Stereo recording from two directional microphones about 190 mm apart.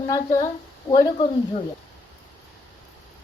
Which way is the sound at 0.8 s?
20° left (ahead or behind).